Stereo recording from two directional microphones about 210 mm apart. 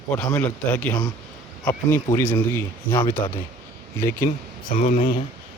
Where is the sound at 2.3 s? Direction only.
5° left (ahead or behind).